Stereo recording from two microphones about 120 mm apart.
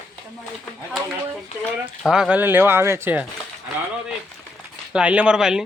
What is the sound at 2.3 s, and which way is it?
Speech, 15° right (ahead or behind).